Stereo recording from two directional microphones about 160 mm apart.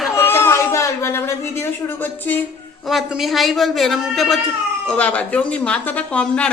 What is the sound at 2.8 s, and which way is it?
A woman's voice, centre (ahead or behind).